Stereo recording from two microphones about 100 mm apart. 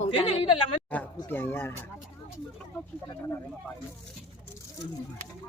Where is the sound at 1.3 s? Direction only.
20° left (ahead or behind).